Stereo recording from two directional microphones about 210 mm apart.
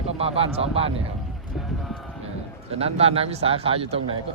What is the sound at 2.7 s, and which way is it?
Speech, 30° right (ahead or behind).